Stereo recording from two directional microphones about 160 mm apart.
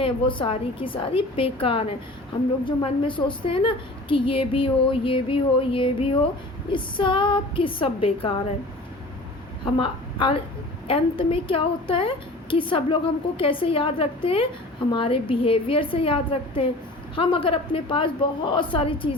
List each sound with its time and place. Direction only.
0.0 s a woman's voice: 35° left (ahead or behind)
9.6 s a woman's voice: 30° left (ahead or behind)